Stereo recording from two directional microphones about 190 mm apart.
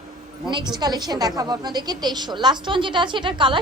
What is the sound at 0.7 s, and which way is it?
A woman's voice, 20° right (ahead or behind).